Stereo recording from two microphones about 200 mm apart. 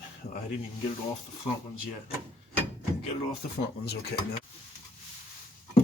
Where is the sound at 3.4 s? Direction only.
45° left (ahead or behind).